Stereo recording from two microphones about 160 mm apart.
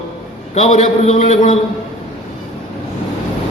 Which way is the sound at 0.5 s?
45° left (ahead or behind).